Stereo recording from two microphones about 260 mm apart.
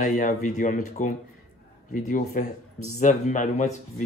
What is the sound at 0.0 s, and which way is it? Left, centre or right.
Speech, left.